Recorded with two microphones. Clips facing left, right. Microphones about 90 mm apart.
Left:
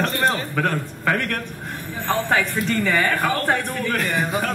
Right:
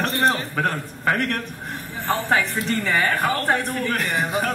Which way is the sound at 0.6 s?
25° right (ahead or behind).